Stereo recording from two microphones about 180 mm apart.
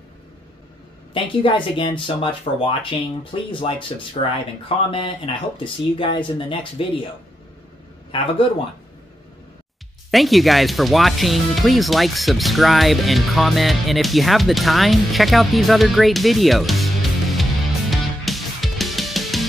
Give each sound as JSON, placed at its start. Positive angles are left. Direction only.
{"t": 1.1, "sound": "speech", "side_deg": 30}
{"t": 8.1, "sound": "speech", "side_deg": 30}
{"t": 10.1, "sound": "speech", "side_deg": 0}